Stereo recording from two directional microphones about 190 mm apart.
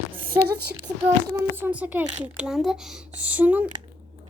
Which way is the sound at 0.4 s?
55° right (ahead or behind).